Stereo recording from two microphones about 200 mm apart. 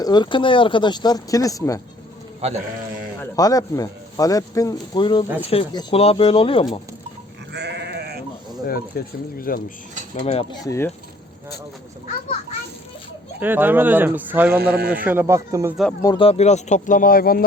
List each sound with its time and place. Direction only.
0.0 s speech: 20° left (ahead or behind)
2.4 s speech: 30° right (ahead or behind)
3.2 s speech: 15° left (ahead or behind)
7.5 s sheep: 55° right (ahead or behind)
8.9 s speech: 50° left (ahead or behind)
10.2 s speech: 30° left (ahead or behind)
10.6 s speech: 15° left (ahead or behind)
13.4 s speech: 10° right (ahead or behind)
14.5 s a man's voice: 50° right (ahead or behind)
15.0 s speech: 10° right (ahead or behind)
16.0 s speech: 20° left (ahead or behind); by 17.4 s 45° left (ahead or behind)